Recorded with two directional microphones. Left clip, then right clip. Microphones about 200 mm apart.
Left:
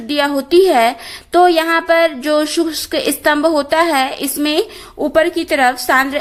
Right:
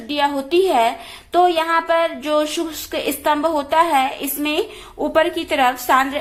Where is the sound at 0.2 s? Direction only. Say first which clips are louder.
Left 5 dB; 40° left (ahead or behind).